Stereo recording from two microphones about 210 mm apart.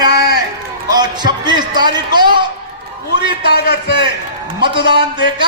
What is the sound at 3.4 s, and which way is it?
A man's voice, 50° left (ahead or behind).